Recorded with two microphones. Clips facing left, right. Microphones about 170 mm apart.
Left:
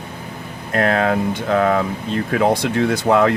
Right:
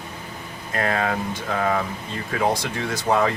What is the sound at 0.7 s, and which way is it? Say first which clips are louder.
Speech: left 6 dB; 70° left (ahead or behind).